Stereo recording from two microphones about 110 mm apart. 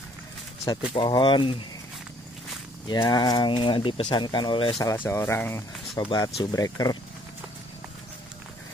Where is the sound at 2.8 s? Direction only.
40° left (ahead or behind).